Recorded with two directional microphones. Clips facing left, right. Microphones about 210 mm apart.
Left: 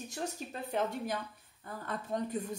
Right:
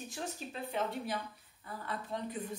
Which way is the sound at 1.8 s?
45° left (ahead or behind).